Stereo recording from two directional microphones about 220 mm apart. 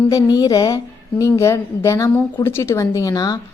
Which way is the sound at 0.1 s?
15° left (ahead or behind).